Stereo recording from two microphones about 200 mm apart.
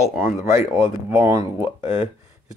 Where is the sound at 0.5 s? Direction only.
15° right (ahead or behind).